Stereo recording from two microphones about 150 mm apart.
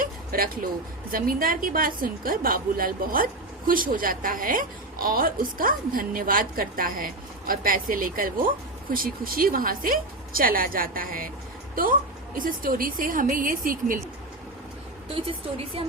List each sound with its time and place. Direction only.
0.0 s a sound: 70° right (ahead or behind)
1.1 s a woman's voice: 70° right (ahead or behind)
15.1 s a woman's voice: 40° right (ahead or behind)